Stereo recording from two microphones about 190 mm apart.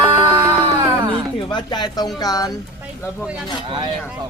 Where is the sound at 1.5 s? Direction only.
20° left (ahead or behind).